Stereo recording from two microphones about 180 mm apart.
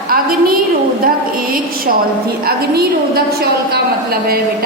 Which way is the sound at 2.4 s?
60° right (ahead or behind).